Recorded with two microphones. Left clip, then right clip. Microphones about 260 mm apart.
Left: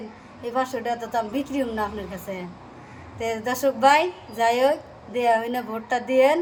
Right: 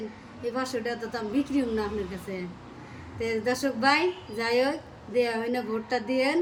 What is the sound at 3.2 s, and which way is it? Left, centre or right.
A woman's voice, centre.